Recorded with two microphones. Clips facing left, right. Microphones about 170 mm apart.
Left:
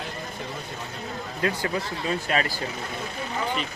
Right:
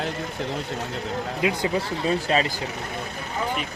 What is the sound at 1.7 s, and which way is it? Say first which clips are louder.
Speech: right 4 dB; 30° right (ahead or behind).